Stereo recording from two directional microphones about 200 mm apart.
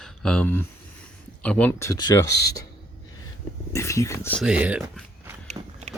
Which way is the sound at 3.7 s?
15° left (ahead or behind).